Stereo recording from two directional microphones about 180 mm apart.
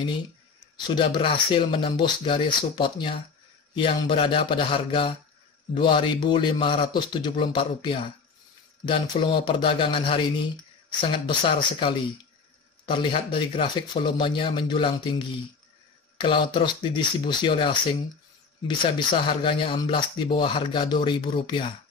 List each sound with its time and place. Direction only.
0.8 s speech: 25° left (ahead or behind)